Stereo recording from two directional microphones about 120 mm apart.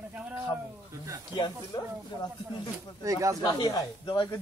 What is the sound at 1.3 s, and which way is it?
Speech, 40° left (ahead or behind).